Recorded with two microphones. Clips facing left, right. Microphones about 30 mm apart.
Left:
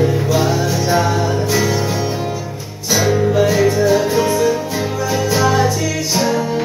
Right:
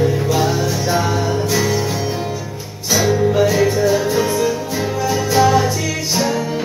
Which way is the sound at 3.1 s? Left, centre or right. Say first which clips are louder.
Left 1 dB; centre.